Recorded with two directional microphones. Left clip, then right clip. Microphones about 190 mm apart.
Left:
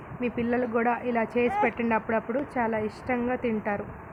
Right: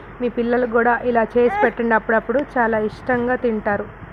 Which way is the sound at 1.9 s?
20° right (ahead or behind).